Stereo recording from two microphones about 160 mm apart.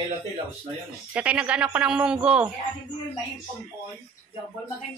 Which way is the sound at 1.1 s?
10° right (ahead or behind).